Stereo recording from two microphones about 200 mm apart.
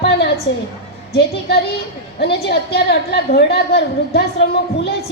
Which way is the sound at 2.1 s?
55° left (ahead or behind).